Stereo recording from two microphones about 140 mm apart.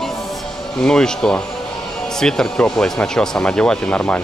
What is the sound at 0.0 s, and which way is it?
Music, centre (ahead or behind).